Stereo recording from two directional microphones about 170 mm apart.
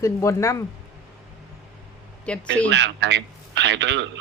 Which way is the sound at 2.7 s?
90° right.